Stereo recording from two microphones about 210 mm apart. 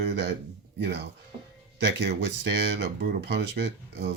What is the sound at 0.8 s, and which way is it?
Speech, 55° right (ahead or behind).